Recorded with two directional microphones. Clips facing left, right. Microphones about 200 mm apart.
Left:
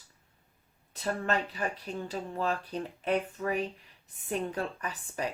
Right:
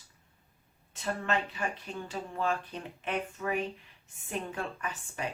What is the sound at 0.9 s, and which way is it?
A woman's voice, 40° left (ahead or behind).